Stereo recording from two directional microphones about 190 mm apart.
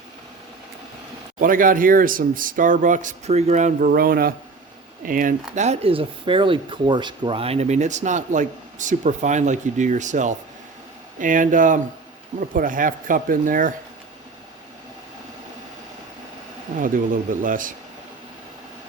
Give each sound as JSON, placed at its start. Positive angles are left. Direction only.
{"t": 1.4, "sound": "speech", "side_deg": -45}
{"t": 17.4, "sound": "speech", "side_deg": -45}